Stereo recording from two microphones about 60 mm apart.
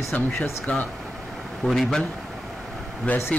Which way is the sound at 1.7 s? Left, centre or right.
Centre.